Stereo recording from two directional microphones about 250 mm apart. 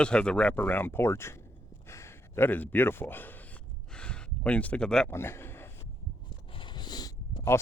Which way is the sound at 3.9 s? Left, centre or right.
Centre.